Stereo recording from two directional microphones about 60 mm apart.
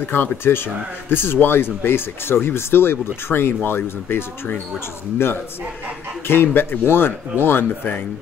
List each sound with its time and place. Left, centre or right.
0.1 s speech: left
6.2 s speech: left